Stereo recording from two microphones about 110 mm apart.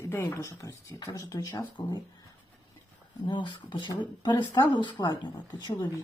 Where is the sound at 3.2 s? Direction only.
45° left (ahead or behind).